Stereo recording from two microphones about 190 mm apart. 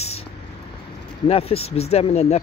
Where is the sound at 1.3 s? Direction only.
30° left (ahead or behind).